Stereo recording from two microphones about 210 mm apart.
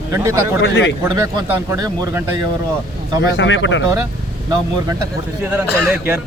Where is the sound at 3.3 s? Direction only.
60° left (ahead or behind).